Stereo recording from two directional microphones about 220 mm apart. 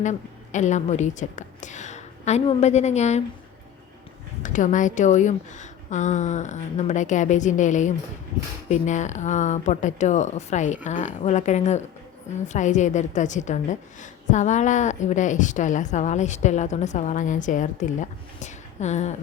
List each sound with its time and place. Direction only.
0.0 s a woman's voice: 35° left (ahead or behind)
4.4 s a woman's voice: 35° left (ahead or behind)